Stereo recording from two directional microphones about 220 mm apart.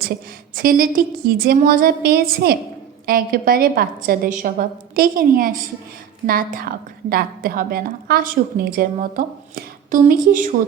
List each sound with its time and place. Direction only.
0.5 s a woman's voice: 40° right (ahead or behind)